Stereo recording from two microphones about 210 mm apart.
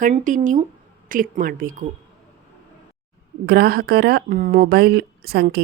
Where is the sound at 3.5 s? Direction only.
50° right (ahead or behind).